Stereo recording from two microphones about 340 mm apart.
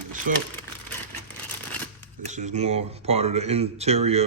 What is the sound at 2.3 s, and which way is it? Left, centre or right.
Speech, right.